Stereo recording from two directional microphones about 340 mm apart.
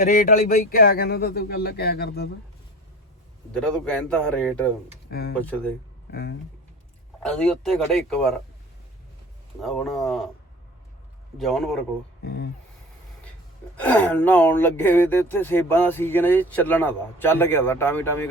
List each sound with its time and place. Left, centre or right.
0.0 s a man's voice: left
3.5 s speech: centre
6.1 s speech: left
7.2 s speech: centre
9.6 s speech: centre
11.3 s speech: centre
12.2 s a man's voice: left
13.7 s speech: centre